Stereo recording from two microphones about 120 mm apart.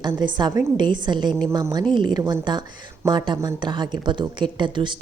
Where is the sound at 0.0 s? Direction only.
35° right (ahead or behind).